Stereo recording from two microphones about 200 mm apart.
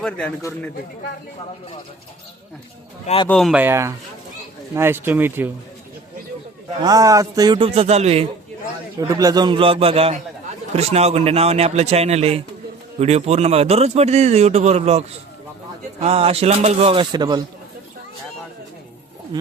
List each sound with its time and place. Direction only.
0.0 s a man's voice: 5° left (ahead or behind)
3.2 s speech: centre (ahead or behind)
3.6 s speech: 10° right (ahead or behind)
6.8 s a man's voice: 15° right (ahead or behind)
9.0 s a man's voice: 15° right (ahead or behind)
16.0 s a man's voice: 30° right (ahead or behind)